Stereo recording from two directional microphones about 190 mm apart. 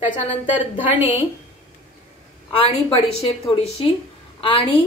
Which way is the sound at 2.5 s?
30° left (ahead or behind).